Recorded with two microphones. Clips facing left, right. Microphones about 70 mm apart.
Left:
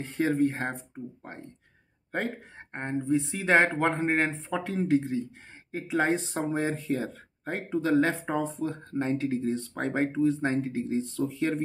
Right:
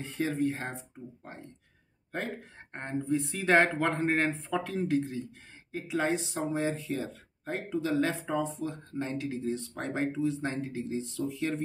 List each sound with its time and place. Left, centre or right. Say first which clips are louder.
0.0 s speech: left 5 dB; left
0.7 s speech: left 5 dB; left
2.7 s speech: left 4 dB; centre